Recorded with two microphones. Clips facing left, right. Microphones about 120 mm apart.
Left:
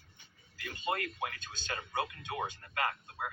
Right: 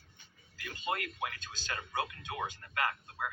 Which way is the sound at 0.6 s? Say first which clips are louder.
Left 1 dB; 30° left (ahead or behind).